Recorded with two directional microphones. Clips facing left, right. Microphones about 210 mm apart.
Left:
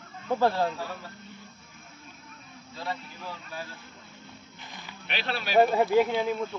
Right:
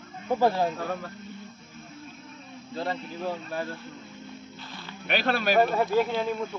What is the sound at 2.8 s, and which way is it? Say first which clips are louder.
Speech: right 5 dB; 55° right (ahead or behind).